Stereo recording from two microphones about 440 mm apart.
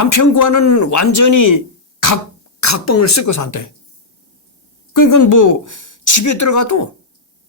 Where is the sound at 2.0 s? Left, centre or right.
Left.